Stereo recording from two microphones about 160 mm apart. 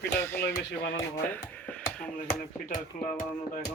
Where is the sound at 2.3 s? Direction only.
55° left (ahead or behind).